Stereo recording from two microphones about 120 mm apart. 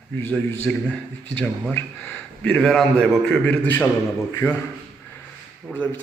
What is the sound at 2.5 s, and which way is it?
A man's voice, 5° left (ahead or behind).